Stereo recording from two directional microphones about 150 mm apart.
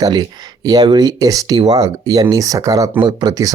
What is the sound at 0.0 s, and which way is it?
Speech, 25° right (ahead or behind).